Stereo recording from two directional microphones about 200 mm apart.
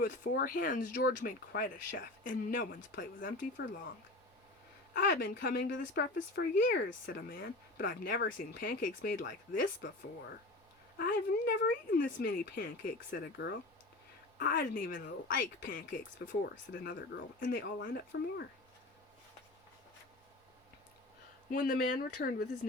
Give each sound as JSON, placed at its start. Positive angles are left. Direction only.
{"t": 0.0, "sound": "speech", "side_deg": 45}
{"t": 4.9, "sound": "speech", "side_deg": 55}
{"t": 7.1, "sound": "speech", "side_deg": 45}
{"t": 10.9, "sound": "speech", "side_deg": 50}
{"t": 21.5, "sound": "speech", "side_deg": 45}